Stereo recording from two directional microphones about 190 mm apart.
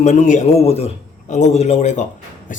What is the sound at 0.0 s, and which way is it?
A man's voice, 40° left (ahead or behind).